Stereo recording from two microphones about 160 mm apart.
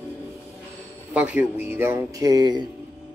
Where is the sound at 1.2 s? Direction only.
10° right (ahead or behind); by 2.6 s 25° right (ahead or behind).